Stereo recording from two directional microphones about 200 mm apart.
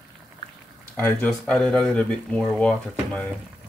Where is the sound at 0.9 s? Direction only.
10° left (ahead or behind).